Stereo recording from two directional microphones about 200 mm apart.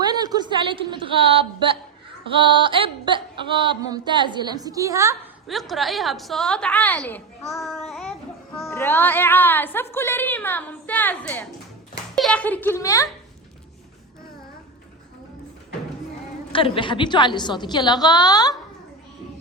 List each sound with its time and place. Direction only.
0.0 s a woman's voice: 20° right (ahead or behind)
2.3 s a sound: 25° right (ahead or behind)
5.5 s a woman's voice: centre (ahead or behind)
16.5 s a woman's voice: 25° left (ahead or behind)